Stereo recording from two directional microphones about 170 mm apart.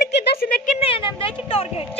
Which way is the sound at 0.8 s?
30° left (ahead or behind).